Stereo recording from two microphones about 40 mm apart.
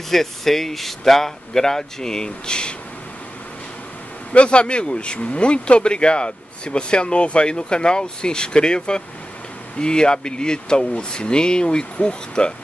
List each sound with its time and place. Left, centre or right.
0.1 s speech: centre
4.3 s speech: left